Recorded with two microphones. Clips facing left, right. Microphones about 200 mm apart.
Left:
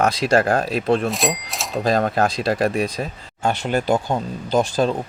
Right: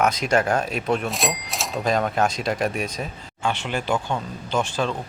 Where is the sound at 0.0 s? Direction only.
30° left (ahead or behind).